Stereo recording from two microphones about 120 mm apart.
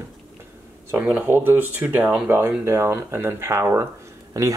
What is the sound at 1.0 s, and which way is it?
Speech, 15° right (ahead or behind).